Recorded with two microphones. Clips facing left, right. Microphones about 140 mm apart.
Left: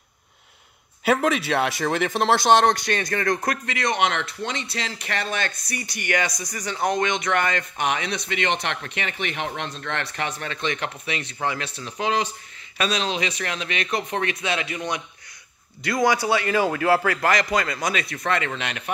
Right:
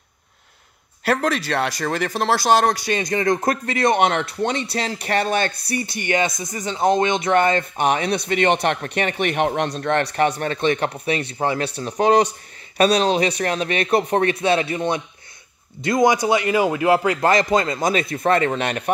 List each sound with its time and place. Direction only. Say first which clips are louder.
1.0 s speech: even; centre (ahead or behind)
3.0 s a man's voice: right 4 dB; 20° right (ahead or behind)
3.6 s speech: right 7 dB; 35° right (ahead or behind)
3.9 s a man's voice: right 5 dB; 45° right (ahead or behind)
11.7 s speech: right 8 dB; 50° right (ahead or behind)
12.7 s a man's voice: right 8 dB; 35° right (ahead or behind)